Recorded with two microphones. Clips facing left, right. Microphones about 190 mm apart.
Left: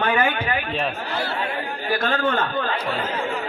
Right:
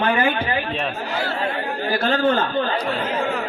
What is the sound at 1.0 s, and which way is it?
A man's voice, 35° right (ahead or behind).